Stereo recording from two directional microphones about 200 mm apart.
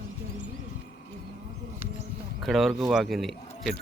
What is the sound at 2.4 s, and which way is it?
Speech, centre (ahead or behind).